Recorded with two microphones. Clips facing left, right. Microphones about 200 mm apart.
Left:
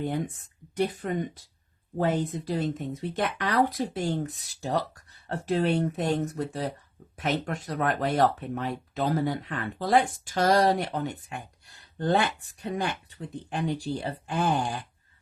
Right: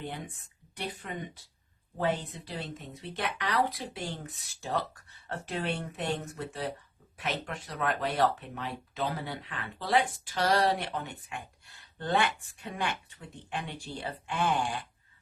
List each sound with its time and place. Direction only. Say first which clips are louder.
0.8 s speech: left 10 dB; 45° left (ahead or behind)